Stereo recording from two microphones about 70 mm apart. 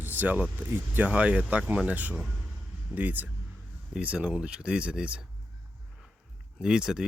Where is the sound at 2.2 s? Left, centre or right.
Centre.